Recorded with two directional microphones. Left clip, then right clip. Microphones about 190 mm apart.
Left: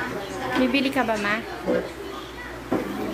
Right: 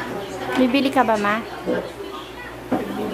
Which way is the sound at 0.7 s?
15° right (ahead or behind).